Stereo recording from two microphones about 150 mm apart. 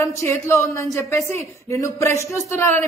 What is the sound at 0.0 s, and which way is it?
A woman's voice, 20° left (ahead or behind).